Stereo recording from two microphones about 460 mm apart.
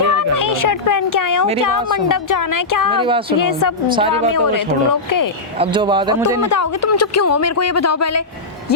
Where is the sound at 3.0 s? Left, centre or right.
Centre.